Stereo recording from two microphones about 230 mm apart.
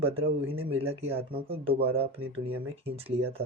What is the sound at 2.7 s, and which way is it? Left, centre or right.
Speech, right.